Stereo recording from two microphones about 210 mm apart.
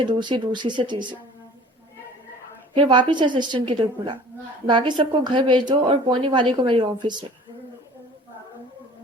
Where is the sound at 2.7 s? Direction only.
20° right (ahead or behind).